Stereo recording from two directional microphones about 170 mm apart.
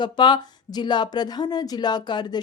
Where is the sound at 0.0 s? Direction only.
25° left (ahead or behind).